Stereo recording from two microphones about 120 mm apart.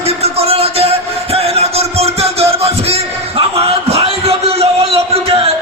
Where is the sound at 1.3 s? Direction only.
60° right (ahead or behind).